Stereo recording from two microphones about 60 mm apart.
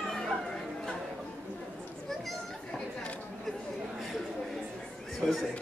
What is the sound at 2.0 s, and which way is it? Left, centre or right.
Chatter, centre.